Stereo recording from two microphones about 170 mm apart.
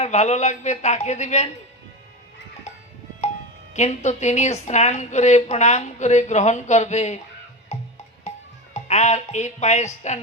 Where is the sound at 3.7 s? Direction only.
45° left (ahead or behind).